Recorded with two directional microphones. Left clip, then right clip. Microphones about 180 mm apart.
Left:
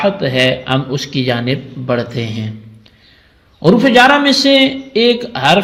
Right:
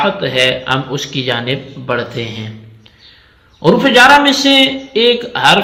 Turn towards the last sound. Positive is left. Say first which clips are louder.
# right 2 dB
turn(degrees=45)  # may be behind; listen again after turning